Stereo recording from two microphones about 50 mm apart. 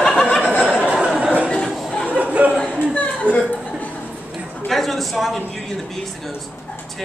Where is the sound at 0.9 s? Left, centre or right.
Right.